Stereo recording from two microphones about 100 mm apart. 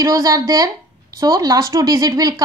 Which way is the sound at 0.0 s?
35° right (ahead or behind).